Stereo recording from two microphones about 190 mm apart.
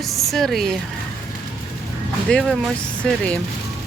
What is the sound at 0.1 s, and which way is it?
Speech, centre (ahead or behind).